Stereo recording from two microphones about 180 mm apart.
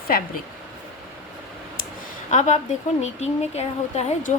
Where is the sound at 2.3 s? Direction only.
40° left (ahead or behind).